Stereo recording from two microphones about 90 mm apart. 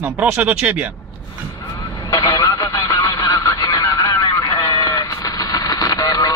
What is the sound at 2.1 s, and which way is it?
Honk, 40° left (ahead or behind).